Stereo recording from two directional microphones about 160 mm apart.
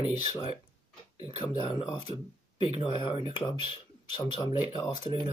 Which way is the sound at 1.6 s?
30° left (ahead or behind).